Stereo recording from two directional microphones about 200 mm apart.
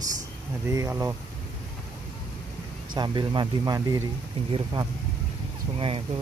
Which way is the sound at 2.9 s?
20° right (ahead or behind).